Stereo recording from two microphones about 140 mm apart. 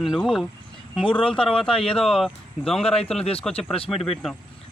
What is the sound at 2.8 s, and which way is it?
Speech, 45° left (ahead or behind).